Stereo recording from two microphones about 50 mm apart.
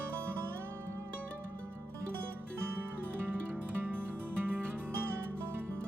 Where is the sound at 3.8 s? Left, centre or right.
Right.